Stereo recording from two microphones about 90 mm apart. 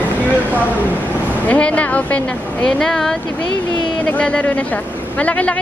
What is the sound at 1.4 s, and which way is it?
A man's voice, 15° left (ahead or behind).